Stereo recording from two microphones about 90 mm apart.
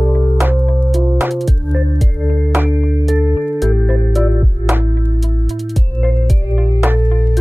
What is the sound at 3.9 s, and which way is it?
Music, centre (ahead or behind).